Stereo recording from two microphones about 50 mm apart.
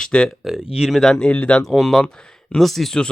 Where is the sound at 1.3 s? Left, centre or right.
Left.